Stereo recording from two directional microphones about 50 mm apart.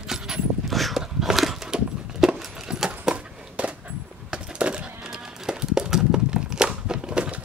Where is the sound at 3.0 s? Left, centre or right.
Right.